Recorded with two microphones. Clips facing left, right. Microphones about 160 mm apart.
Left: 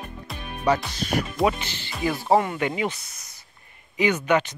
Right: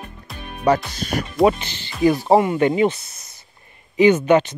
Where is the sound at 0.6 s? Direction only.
45° right (ahead or behind).